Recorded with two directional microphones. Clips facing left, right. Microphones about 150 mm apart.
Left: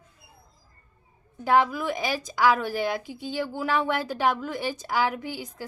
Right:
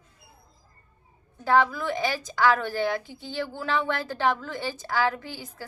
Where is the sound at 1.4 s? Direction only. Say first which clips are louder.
Even; 15° left (ahead or behind).